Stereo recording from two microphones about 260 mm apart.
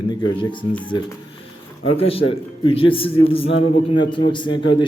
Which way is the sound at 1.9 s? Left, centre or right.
Left.